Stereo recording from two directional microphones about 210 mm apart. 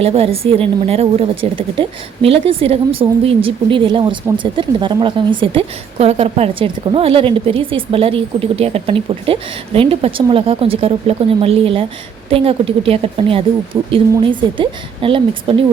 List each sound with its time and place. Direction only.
0.0 s a woman's voice: 30° right (ahead or behind)